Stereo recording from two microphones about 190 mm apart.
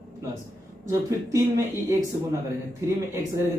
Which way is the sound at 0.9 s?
15° right (ahead or behind).